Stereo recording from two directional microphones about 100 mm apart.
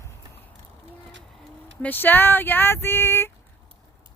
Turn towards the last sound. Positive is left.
turn(degrees=25)  # may be behind; listen again after turning